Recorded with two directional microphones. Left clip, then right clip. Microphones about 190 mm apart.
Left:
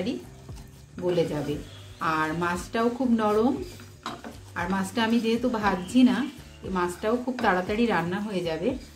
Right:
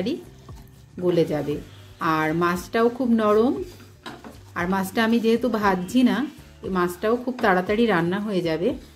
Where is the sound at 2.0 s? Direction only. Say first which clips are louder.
Right 4 dB; 45° right (ahead or behind).